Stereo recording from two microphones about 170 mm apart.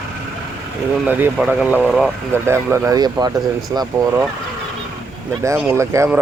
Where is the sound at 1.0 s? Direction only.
10° right (ahead or behind).